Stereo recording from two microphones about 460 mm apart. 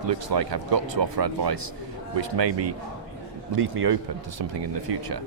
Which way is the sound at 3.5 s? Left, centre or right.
Right.